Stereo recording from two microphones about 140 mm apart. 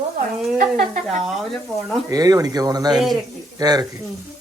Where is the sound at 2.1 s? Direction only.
25° right (ahead or behind).